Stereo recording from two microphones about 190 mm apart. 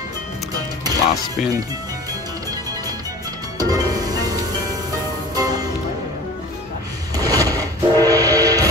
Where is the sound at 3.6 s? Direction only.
20° right (ahead or behind).